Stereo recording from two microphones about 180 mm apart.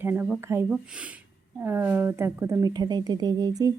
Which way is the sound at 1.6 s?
10° right (ahead or behind).